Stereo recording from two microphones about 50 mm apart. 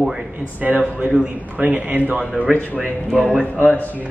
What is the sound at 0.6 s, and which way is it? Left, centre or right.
A man's voice, right.